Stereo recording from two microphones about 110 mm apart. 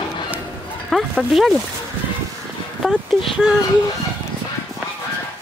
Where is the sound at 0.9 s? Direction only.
5° left (ahead or behind).